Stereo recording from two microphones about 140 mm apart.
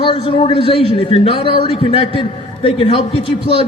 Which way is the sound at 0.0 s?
40° left (ahead or behind).